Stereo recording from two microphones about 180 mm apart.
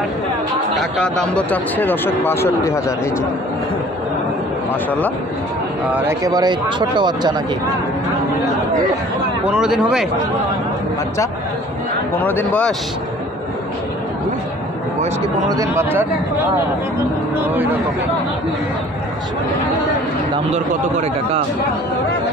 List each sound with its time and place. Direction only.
0.7 s speech: 5° left (ahead or behind)
6.0 s speech: 20° right (ahead or behind)
9.4 s speech: 5° right (ahead or behind)
12.3 s speech: 10° left (ahead or behind)
15.5 s speech: 15° right (ahead or behind)